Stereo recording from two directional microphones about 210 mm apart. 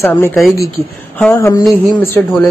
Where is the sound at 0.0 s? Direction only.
10° left (ahead or behind).